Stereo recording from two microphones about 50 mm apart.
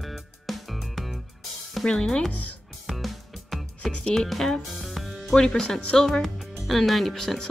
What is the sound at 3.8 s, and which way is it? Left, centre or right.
Music, left.